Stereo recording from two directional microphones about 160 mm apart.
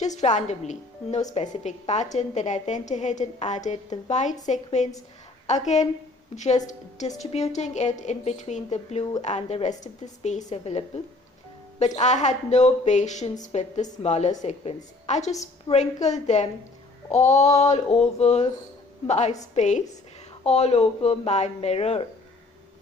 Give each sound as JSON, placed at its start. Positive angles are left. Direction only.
{"t": 0.0, "sound": "a woman's voice", "side_deg": 45}